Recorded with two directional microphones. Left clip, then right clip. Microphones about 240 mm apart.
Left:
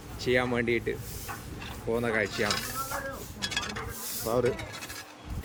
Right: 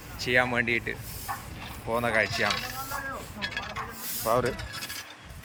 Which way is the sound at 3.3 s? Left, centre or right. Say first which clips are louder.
Left 3 dB; left.